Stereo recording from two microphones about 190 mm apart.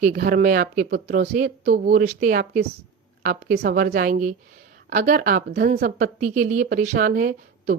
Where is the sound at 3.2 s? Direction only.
55° right (ahead or behind).